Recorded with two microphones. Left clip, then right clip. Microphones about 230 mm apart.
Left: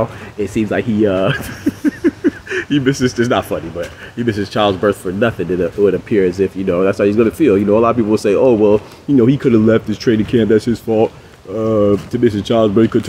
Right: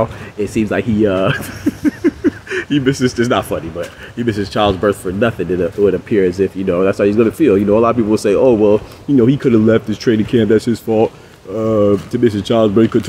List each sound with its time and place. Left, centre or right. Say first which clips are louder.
0.0 s speech: right 1 dB; centre